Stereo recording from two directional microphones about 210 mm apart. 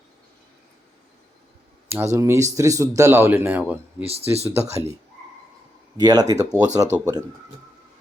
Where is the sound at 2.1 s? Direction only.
15° right (ahead or behind).